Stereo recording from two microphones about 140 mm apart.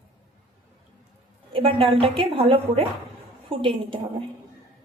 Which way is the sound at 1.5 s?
40° right (ahead or behind).